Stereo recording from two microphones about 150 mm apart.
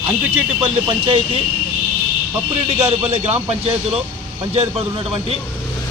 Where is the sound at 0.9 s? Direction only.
35° right (ahead or behind).